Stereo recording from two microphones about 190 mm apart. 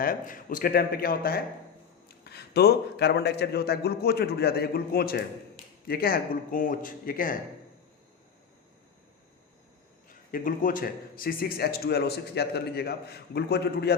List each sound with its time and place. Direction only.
0.0 s a man's voice: 50° left (ahead or behind)
10.1 s a man's voice: 45° left (ahead or behind)